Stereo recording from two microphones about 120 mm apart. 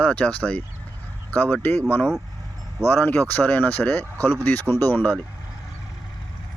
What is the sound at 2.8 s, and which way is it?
Speech, 20° left (ahead or behind).